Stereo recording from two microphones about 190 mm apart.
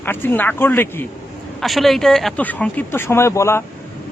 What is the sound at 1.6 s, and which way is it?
Speech, centre (ahead or behind).